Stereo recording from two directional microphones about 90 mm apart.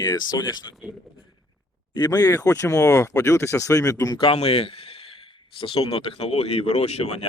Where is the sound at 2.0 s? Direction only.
50° left (ahead or behind).